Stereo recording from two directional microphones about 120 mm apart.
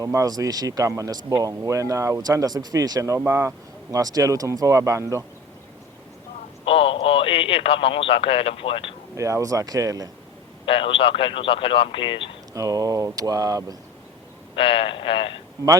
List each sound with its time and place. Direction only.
0.0 s speech: 30° right (ahead or behind)
6.7 s speech: 50° left (ahead or behind)
9.1 s speech: 25° right (ahead or behind)
10.7 s speech: 45° left (ahead or behind)
12.5 s speech: 30° right (ahead or behind)
14.5 s speech: 50° left (ahead or behind)